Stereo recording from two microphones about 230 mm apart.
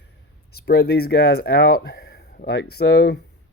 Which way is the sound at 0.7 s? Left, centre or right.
Left.